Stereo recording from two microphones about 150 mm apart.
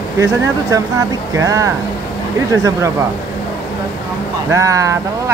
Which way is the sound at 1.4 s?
20° right (ahead or behind).